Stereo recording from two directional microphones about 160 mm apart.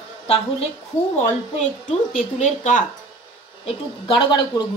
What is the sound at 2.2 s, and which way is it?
Speech, 50° left (ahead or behind).